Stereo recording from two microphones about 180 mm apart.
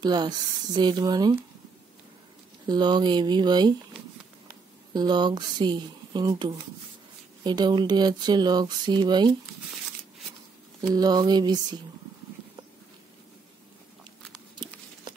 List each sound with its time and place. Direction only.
0.0 s speech: 25° right (ahead or behind)
2.7 s speech: 25° right (ahead or behind)
4.9 s speech: 25° right (ahead or behind)
11.0 s speech: 20° right (ahead or behind)
14.5 s a sound: 25° right (ahead or behind)